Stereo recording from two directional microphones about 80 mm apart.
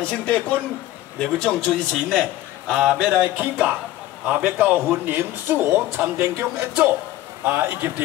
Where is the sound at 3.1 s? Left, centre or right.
Right.